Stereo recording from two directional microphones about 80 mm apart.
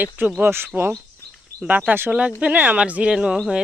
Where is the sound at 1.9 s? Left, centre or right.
Right; by 3.4 s centre.